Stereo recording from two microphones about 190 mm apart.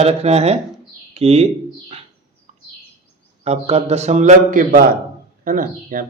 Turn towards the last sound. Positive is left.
turn(degrees=-45)  # may be behind; listen again after turning